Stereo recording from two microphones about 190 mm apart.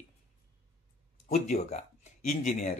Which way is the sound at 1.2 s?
35° left (ahead or behind).